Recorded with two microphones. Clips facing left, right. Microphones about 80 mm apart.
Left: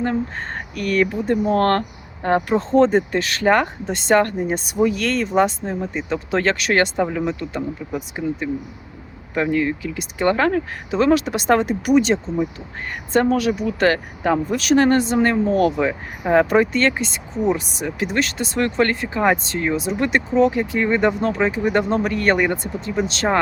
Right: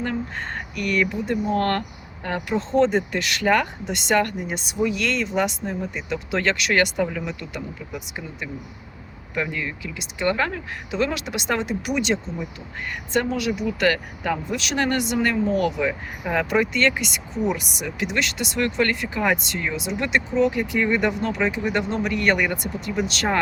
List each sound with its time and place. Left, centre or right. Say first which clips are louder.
0.0 s speech: left 5 dB; left
20.5 s speech: left 2 dB; left